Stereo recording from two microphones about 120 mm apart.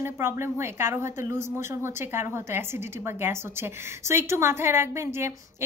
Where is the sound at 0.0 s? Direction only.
20° right (ahead or behind).